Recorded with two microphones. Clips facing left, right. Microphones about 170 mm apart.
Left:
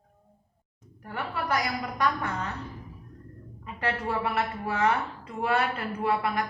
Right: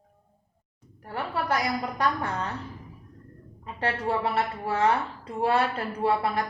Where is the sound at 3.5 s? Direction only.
30° right (ahead or behind).